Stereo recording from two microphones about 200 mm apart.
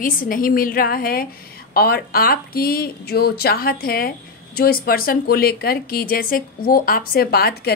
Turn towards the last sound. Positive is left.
turn(degrees=50)  # may be behind; listen again after turning